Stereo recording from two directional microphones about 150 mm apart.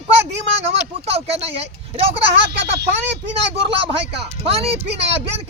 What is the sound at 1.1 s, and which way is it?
Speech, 40° right (ahead or behind).